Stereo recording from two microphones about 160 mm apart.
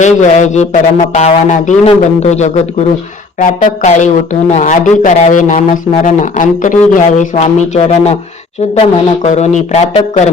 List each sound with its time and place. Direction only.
0.0 s a man's voice: 50° left (ahead or behind)
7.4 s a man's voice: 40° left (ahead or behind)